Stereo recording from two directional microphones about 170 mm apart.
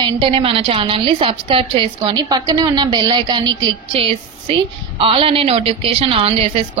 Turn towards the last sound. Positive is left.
turn(degrees=-35)  # may be behind; listen again after turning